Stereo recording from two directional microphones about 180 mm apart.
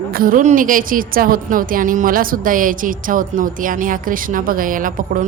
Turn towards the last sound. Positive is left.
turn(degrees=-50)  # may be behind; listen again after turning